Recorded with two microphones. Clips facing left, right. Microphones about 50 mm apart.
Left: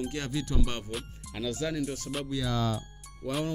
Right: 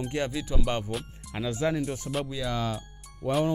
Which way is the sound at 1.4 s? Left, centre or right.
Right.